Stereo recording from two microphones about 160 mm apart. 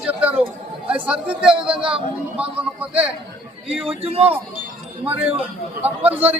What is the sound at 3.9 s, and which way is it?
Speech, 40° right (ahead or behind).